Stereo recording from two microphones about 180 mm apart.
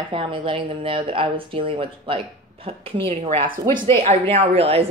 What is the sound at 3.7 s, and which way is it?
A woman's voice, 45° right (ahead or behind).